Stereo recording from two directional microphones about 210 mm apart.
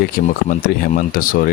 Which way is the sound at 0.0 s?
45° left (ahead or behind).